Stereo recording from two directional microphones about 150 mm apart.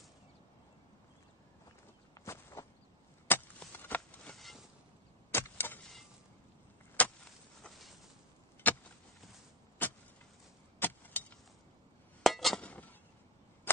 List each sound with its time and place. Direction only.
2.1 s walk: 20° left (ahead or behind)
3.3 s chop: 15° left (ahead or behind)
5.3 s vehicle: 15° left (ahead or behind)
7.0 s vehicle: 10° left (ahead or behind)
7.6 s a sound: centre (ahead or behind)
8.6 s a sound: 10° left (ahead or behind)
10.8 s vehicle: 10° left (ahead or behind)
12.2 s chink: centre (ahead or behind)